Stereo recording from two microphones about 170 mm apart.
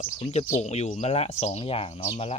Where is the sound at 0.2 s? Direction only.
40° left (ahead or behind).